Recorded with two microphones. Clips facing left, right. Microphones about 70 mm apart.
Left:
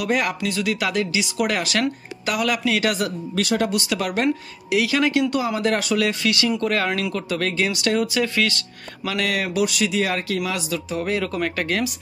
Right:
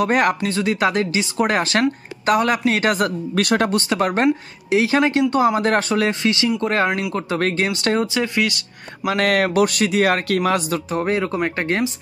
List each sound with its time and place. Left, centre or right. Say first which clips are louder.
0.0 s speech: right 5 dB; right
3.3 s speech: right 3 dB; right
3.9 s speech: right 4 dB; right
6.9 s speech: right 2 dB; centre
7.2 s speech: right 3 dB; right
9.1 s speech: right 6 dB; right